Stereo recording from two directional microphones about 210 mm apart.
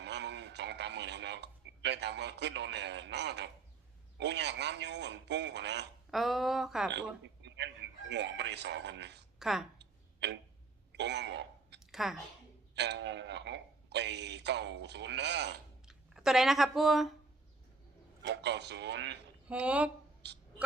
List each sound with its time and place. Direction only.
0.0 s a man's voice: 55° right (ahead or behind)
6.1 s speech: centre (ahead or behind)
7.4 s chicken: 55° right (ahead or behind)
8.1 s speech: 55° right (ahead or behind)
9.4 s a woman's voice: centre (ahead or behind)
9.7 s a sound: 55° right (ahead or behind)
11.9 s a sound: centre (ahead or behind)
12.7 s a sound: 55° right (ahead or behind)
15.9 s speech: centre (ahead or behind)
18.2 s speech: 55° right (ahead or behind)
19.5 s speech: 5° right (ahead or behind)